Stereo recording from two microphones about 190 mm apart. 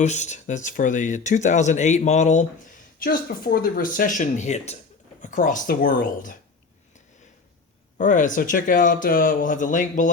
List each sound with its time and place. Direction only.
0.0 s speech: 40° left (ahead or behind)
7.9 s speech: 40° left (ahead or behind)